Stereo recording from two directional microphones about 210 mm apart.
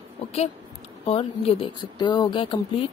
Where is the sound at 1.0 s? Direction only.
25° left (ahead or behind).